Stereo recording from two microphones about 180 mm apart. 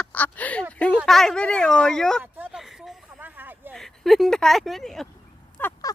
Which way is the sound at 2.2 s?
10° right (ahead or behind).